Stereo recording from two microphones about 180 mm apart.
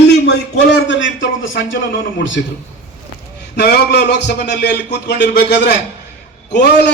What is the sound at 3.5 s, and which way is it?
A man's voice, 65° left (ahead or behind).